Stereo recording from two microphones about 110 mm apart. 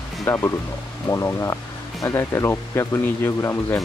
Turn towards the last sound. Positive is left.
turn(degrees=25)  # may be behind; listen again after turning